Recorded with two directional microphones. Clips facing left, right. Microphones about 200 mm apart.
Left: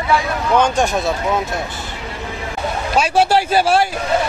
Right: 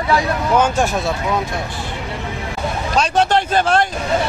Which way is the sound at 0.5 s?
5° right (ahead or behind).